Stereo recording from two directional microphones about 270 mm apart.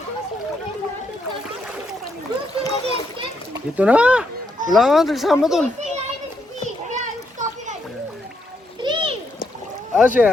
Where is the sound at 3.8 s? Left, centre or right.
Centre.